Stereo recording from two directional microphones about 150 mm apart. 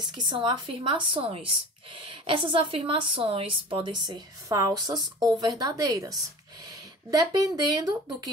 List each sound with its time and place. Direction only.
0.2 s a woman's voice: 30° right (ahead or behind)